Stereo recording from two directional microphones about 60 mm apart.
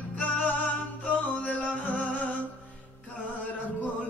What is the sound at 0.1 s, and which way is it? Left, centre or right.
Music, left.